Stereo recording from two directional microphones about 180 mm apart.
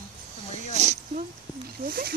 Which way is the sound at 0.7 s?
40° right (ahead or behind).